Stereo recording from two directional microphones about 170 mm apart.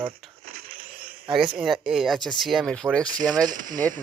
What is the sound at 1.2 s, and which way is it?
Speech, 30° right (ahead or behind).